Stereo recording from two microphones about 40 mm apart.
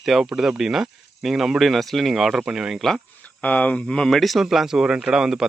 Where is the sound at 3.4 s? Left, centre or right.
Left.